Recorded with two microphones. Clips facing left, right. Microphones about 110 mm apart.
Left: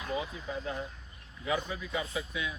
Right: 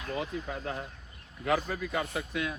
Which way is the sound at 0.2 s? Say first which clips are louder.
Right 2 dB; 55° right (ahead or behind).